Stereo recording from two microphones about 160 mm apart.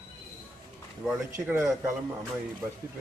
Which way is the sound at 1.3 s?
15° right (ahead or behind).